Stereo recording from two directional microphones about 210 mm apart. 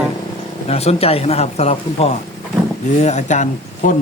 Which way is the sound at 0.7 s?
30° left (ahead or behind).